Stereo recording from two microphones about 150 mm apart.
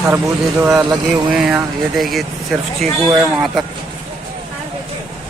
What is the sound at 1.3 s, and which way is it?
Speech, 5° right (ahead or behind).